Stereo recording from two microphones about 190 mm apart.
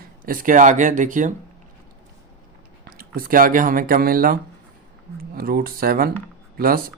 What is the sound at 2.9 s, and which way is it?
Speech, 50° right (ahead or behind).